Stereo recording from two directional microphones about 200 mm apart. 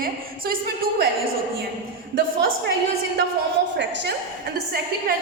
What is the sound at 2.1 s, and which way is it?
Speech, 50° right (ahead or behind).